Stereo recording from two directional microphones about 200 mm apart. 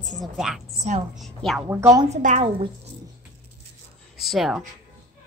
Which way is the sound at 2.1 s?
35° right (ahead or behind).